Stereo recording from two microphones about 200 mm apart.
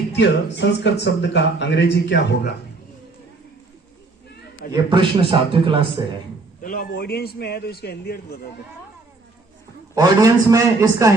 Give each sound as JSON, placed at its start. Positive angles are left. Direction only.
{"t": 0.2, "sound": "speech", "side_deg": 60}
{"t": 4.7, "sound": "a man's voice", "side_deg": -25}
{"t": 6.6, "sound": "a man's voice", "side_deg": 45}
{"t": 9.9, "sound": "a man's voice", "side_deg": -20}